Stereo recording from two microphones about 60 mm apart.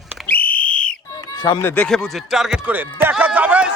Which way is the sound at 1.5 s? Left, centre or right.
Left.